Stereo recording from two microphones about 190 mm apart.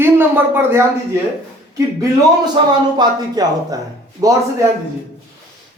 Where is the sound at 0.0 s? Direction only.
10° right (ahead or behind).